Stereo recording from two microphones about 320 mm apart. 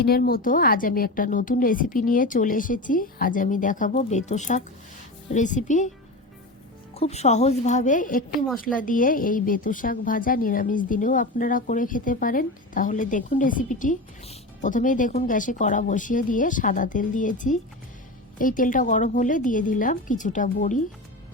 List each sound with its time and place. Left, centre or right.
0.0 s a woman's voice: left
6.9 s a woman's voice: centre